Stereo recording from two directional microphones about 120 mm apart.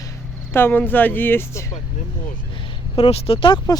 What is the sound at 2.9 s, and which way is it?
Speech, 55° left (ahead or behind).